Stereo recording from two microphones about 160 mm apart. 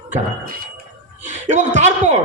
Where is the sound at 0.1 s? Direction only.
65° right (ahead or behind).